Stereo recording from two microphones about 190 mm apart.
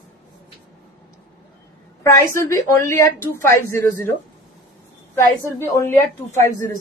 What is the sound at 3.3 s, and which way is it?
Speech, 15° left (ahead or behind).